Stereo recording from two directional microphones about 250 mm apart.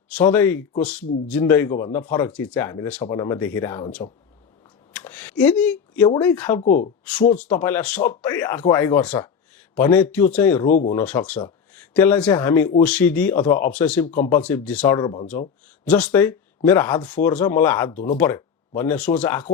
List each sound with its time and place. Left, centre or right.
0.1 s speech: centre
4.9 s a sound: centre
6.2 s speech: centre
6.6 s speech: left
7.3 s speech: centre
10.7 s speech: left
10.9 s speech: centre
14.9 s speech: centre
15.9 s speech: centre